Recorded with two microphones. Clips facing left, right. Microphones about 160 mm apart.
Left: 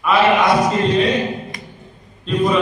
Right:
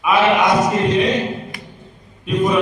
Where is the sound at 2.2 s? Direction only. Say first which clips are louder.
Even; 20° right (ahead or behind).